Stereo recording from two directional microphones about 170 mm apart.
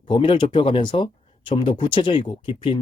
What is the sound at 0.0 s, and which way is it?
Speech, 30° left (ahead or behind).